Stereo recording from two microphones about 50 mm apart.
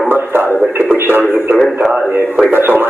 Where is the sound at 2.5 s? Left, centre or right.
Right.